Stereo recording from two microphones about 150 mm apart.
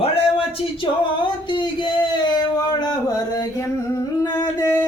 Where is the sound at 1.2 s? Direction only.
30° left (ahead or behind).